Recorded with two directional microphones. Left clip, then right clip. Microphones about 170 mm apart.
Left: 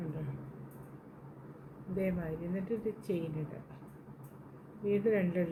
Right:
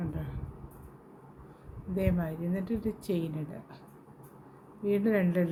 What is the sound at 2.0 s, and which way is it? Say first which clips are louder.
Speech: right 4 dB; 85° right.